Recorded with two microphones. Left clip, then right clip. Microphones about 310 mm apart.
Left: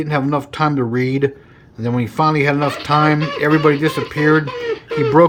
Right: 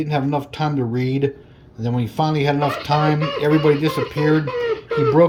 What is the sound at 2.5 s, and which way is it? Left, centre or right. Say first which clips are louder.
Speech: left 2 dB; left.